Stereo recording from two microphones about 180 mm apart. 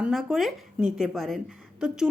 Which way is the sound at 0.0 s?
Centre (ahead or behind).